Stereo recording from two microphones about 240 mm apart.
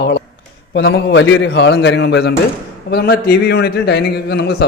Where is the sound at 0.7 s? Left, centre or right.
Left.